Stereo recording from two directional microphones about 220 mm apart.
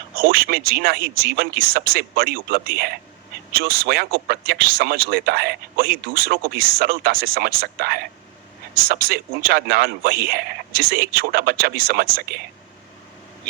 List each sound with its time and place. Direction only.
0.2 s speech: 45° right (ahead or behind)